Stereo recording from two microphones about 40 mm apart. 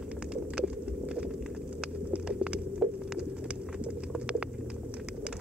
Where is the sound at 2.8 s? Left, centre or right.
Centre.